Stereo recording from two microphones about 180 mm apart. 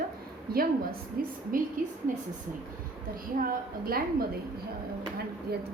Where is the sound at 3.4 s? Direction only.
55° right (ahead or behind).